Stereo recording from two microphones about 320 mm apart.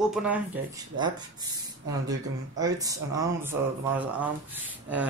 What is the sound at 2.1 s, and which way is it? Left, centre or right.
Speech, centre.